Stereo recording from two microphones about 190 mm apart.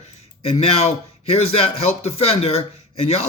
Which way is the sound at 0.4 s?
30° left (ahead or behind).